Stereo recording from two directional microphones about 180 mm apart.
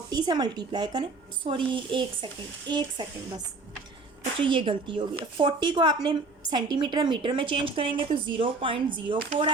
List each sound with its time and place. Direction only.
0.1 s speech: 20° right (ahead or behind)
4.4 s speech: 30° right (ahead or behind)